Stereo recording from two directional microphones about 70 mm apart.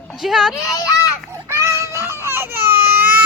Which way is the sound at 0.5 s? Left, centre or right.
Left.